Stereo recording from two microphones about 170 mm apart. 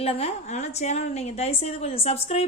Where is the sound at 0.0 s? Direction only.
35° left (ahead or behind).